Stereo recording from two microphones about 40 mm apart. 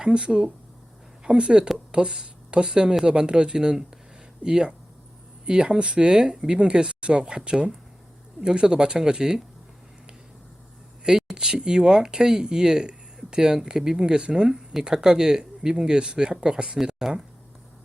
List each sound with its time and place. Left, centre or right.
0.0 s a woman's voice: right
11.0 s speech: centre